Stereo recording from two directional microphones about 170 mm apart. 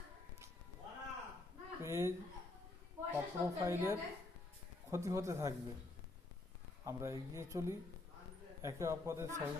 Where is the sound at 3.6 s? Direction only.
15° right (ahead or behind).